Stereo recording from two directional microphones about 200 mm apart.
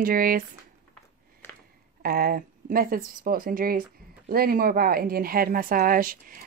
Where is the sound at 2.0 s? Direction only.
50° right (ahead or behind).